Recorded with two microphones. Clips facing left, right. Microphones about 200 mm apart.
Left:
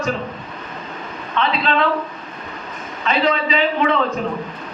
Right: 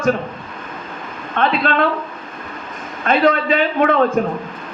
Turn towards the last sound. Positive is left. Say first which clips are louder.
# right 3 dB
turn(degrees=-50)  # may be behind; listen again after turning